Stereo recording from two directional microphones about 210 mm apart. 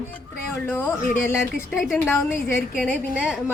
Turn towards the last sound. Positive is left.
turn(degrees=5)  # may be behind; listen again after turning